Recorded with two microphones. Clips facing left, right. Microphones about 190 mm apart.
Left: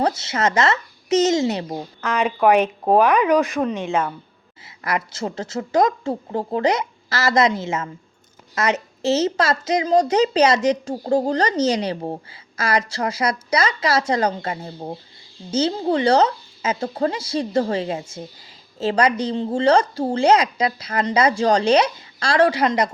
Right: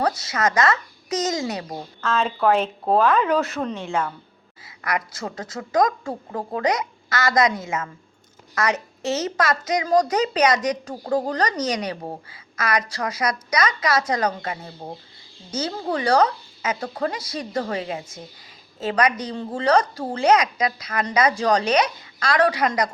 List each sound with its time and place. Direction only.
0.0 s speech: 25° left (ahead or behind)